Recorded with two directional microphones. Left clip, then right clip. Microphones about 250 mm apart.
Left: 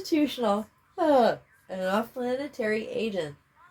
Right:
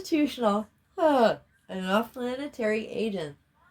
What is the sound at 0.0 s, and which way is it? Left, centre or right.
Speech, right.